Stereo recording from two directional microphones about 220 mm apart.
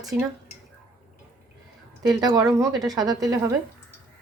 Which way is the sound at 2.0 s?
20° right (ahead or behind).